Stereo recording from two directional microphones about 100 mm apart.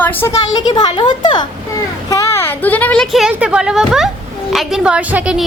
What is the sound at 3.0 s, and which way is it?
A woman's voice, centre (ahead or behind).